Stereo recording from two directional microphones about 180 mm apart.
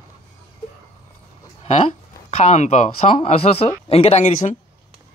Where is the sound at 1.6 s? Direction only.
40° left (ahead or behind).